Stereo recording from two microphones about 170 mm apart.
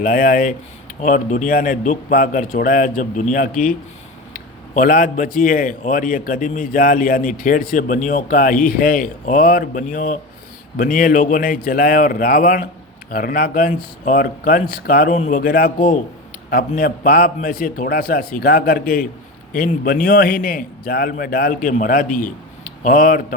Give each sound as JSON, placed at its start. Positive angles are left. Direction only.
{"t": 0.0, "sound": "a man's voice", "side_deg": 55}